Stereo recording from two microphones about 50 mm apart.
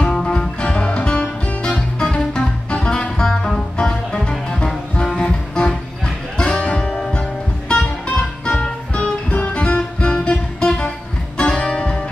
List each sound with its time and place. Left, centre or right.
0.0 s music: centre